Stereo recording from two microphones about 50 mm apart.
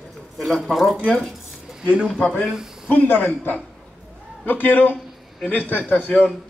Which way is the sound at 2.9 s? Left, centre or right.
Left.